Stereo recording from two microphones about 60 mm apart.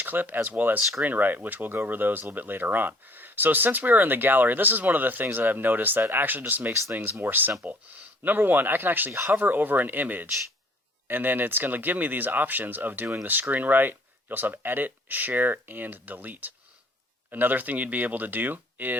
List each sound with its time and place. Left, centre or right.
0.0 s speech: right